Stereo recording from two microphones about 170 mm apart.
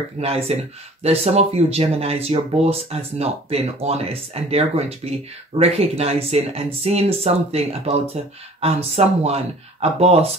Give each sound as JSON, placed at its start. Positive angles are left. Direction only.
{"t": 0.2, "sound": "speech", "side_deg": -40}